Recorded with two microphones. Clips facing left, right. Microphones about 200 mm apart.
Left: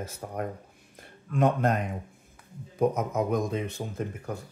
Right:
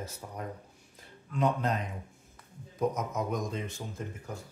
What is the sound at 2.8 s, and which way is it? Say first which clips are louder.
Speech: left 5 dB; 60° left (ahead or behind).